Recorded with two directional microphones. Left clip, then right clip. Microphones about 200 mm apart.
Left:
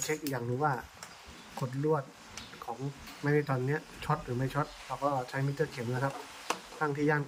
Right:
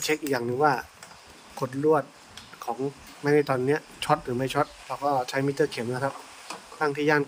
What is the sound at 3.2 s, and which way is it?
Speech, 40° right (ahead or behind).